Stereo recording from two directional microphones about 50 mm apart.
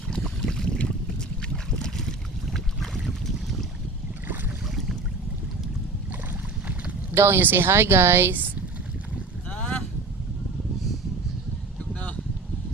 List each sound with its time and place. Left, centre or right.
0.4 s boat: centre
1.8 s boat: centre
4.7 s boat: centre
7.1 s speech: right
9.5 s boat: left
11.9 s a sound: left